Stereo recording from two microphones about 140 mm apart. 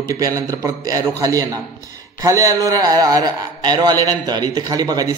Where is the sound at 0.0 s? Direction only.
25° right (ahead or behind).